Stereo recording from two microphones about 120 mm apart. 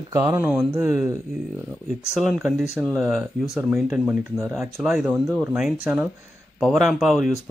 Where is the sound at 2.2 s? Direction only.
Centre (ahead or behind).